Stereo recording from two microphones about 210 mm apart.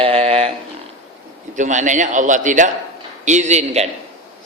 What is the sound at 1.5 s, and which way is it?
A man's voice, 35° right (ahead or behind).